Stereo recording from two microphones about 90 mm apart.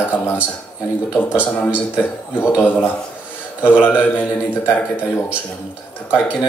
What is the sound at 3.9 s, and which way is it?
Speech, 20° left (ahead or behind).